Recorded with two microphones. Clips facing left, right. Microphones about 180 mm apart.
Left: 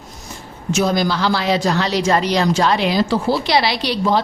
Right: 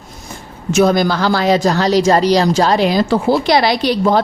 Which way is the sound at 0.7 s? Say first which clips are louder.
Right 5 dB; 60° right (ahead or behind).